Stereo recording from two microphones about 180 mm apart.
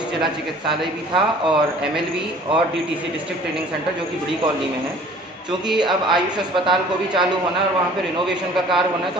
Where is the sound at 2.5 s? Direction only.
30° right (ahead or behind).